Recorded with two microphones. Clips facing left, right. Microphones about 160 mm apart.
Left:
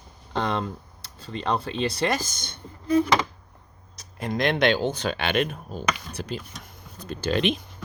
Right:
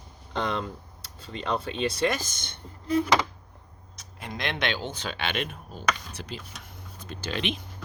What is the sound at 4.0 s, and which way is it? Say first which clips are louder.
Speech: left 9 dB; 40° left (ahead or behind).